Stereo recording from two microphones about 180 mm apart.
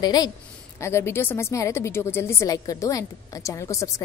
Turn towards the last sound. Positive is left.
turn(degrees=15)  # may be behind; listen again after turning